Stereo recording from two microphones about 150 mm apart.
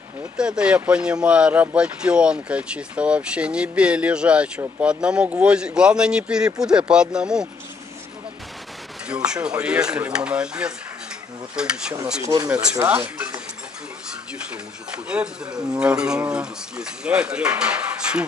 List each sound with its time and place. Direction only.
0.4 s speech: 5° right (ahead or behind)
9.1 s speech: 5° right (ahead or behind)
12.8 s speech: 10° right (ahead or behind)
14.5 s speech: 5° right (ahead or behind)